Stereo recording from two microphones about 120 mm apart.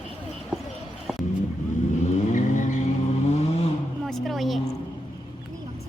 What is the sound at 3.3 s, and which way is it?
Vehicle, 65° left (ahead or behind).